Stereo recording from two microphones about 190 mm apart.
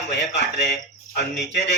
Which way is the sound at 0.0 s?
65° left (ahead or behind).